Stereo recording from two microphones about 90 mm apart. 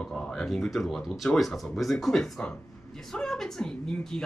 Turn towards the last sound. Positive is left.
turn(degrees=10)  # may be behind; listen again after turning